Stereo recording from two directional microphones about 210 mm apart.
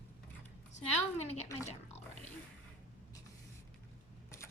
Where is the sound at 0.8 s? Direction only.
30° left (ahead or behind).